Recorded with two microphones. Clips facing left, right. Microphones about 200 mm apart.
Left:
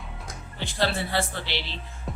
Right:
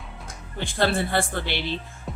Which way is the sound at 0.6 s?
50° right (ahead or behind).